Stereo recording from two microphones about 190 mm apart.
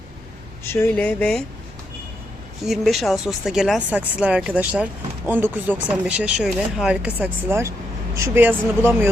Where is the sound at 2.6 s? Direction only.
Centre (ahead or behind).